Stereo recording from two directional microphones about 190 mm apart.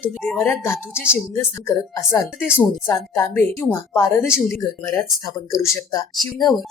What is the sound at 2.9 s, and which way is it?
A woman's voice, 15° left (ahead or behind).